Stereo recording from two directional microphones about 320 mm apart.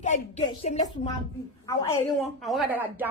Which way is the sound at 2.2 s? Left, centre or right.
Centre.